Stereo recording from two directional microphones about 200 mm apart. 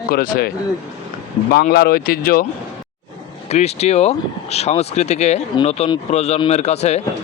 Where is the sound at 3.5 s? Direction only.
35° left (ahead or behind).